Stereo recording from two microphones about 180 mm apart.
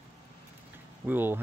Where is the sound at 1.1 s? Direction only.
10° right (ahead or behind).